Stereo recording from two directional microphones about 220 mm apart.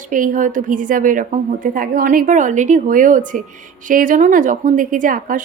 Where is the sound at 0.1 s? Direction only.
35° right (ahead or behind).